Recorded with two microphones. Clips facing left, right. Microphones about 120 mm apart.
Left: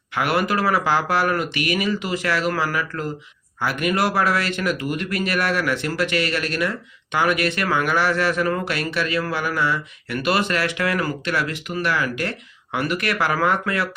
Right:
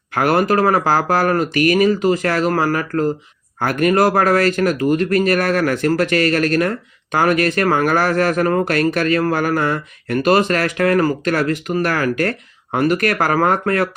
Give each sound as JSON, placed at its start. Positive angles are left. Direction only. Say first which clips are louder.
{"t": 0.1, "sound": "speech", "louder": "right 6 dB", "side_deg": -40}